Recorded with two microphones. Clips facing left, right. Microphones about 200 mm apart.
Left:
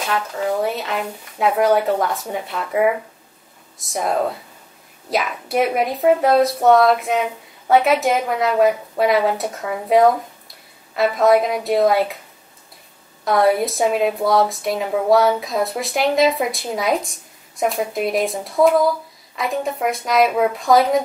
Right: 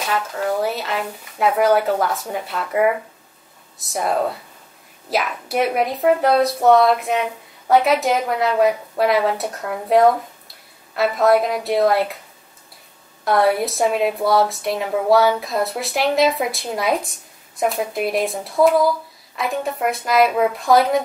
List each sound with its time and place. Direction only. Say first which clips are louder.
0.0 s a woman's voice: even; centre (ahead or behind)
13.2 s a woman's voice: left 1 dB; centre (ahead or behind)